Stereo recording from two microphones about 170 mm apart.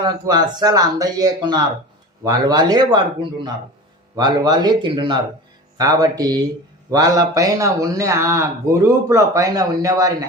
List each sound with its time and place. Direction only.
0.0 s speech: 25° right (ahead or behind)